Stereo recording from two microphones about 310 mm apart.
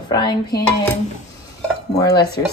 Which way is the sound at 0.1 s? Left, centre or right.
Centre.